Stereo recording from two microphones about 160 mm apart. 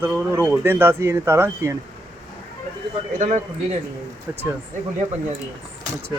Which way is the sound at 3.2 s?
50° right (ahead or behind).